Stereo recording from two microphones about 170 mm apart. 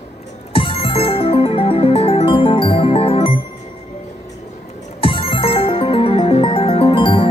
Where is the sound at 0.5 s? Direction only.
30° left (ahead or behind).